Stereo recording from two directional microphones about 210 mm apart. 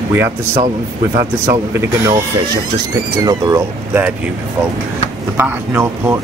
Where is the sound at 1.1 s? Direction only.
15° right (ahead or behind).